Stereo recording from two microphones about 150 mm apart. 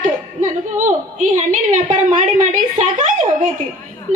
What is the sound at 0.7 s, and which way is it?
Speech, 55° right (ahead or behind).